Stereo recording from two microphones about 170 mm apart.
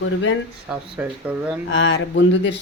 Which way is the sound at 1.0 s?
10° right (ahead or behind).